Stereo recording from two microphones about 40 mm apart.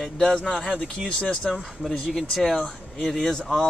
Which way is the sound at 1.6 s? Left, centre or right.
Centre.